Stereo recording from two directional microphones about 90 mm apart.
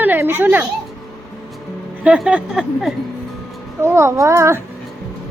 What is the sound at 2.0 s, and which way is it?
Speech, 15° right (ahead or behind).